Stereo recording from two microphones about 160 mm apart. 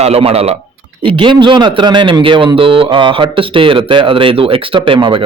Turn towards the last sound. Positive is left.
turn(degrees=-30)  # may be behind; listen again after turning